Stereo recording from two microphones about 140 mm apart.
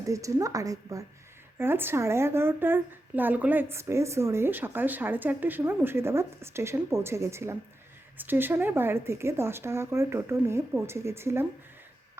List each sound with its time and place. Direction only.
0.0 s a woman's voice: 25° right (ahead or behind)